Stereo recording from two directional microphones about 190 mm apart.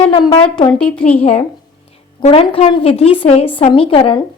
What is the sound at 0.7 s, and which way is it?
Speech, 5° left (ahead or behind).